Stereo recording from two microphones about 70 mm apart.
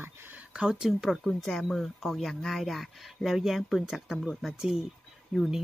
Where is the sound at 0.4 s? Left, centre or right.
Centre.